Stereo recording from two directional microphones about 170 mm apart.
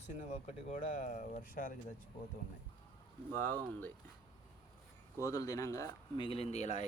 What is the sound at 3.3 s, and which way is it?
Speech, 10° left (ahead or behind).